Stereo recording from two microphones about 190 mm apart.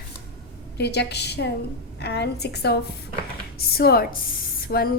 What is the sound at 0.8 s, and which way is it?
A woman's voice, 60° left (ahead or behind).